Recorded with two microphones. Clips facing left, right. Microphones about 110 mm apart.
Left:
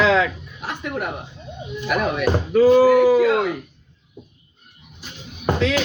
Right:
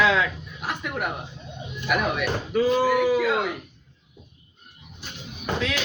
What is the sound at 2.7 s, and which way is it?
Speech, 5° left (ahead or behind).